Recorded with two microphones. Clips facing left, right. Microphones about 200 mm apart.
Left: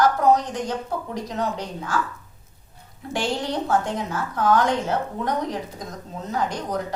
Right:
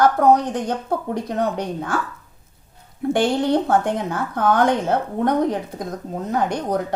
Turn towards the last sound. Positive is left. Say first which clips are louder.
# right 5 dB
turn(degrees=-55)  # may be behind; listen again after turning